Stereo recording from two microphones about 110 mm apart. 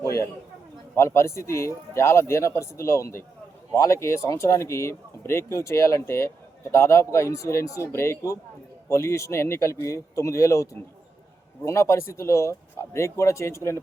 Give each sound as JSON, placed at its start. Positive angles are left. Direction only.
{"t": 0.0, "sound": "a man's voice", "side_deg": 30}